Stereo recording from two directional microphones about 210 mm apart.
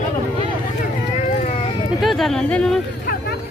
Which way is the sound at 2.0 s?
Centre (ahead or behind).